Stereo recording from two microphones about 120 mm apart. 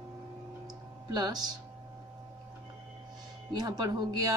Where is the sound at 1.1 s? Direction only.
35° right (ahead or behind).